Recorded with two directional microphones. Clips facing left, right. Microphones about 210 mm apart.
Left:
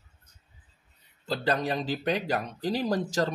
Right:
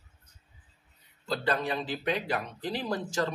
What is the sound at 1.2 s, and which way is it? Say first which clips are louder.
Speech: left 2 dB; 35° left (ahead or behind).